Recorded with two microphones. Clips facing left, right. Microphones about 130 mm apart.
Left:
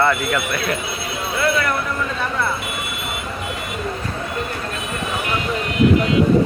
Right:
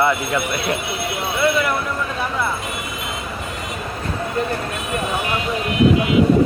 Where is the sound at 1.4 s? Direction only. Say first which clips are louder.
Right 1 dB; 15° right (ahead or behind).